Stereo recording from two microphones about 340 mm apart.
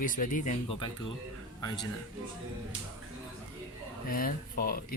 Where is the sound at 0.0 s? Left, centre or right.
Left.